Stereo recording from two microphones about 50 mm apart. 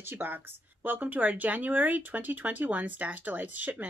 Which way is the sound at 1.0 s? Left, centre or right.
Right.